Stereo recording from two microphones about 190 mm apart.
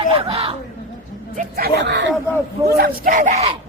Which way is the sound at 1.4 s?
50° right (ahead or behind).